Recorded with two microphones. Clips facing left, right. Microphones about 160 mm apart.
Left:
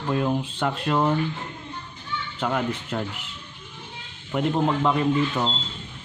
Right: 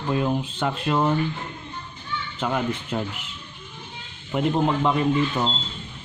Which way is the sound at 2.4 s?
Centre (ahead or behind).